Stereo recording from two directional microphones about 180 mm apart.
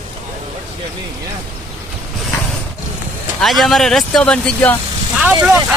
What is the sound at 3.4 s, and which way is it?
Speech, centre (ahead or behind).